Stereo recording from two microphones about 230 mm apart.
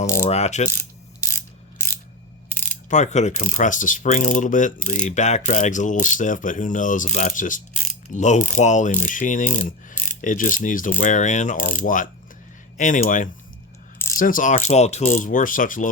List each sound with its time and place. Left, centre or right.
0.3 s mechanisms: left
0.7 s mechanisms: centre
2.5 s mechanisms: left
12.7 s mechanisms: left